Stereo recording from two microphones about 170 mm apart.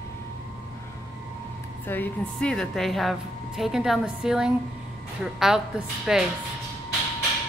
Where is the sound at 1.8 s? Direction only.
10° left (ahead or behind).